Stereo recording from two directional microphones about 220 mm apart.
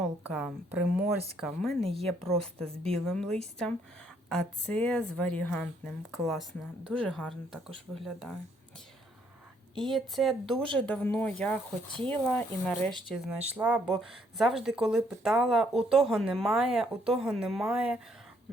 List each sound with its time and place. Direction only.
0.0 s speech: 5° right (ahead or behind)
1.8 s a woman's voice: 25° right (ahead or behind)
2.2 s speech: 5° left (ahead or behind)
9.8 s speech: centre (ahead or behind)